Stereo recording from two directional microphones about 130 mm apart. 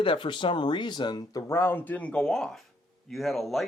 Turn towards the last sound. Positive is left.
turn(degrees=0)  # may be behind; listen again after turning